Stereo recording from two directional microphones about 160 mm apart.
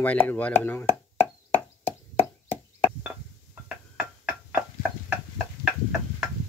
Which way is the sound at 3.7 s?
5° right (ahead or behind).